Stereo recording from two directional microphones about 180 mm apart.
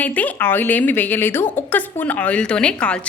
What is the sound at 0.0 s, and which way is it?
A woman's voice, 10° left (ahead or behind).